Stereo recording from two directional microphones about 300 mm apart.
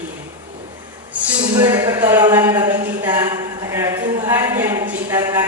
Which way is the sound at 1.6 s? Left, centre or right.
Centre.